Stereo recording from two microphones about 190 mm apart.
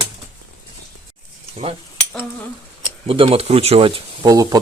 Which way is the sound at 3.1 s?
30° right (ahead or behind).